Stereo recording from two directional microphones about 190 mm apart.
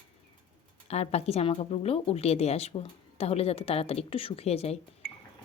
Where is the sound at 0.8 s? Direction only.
35° left (ahead or behind).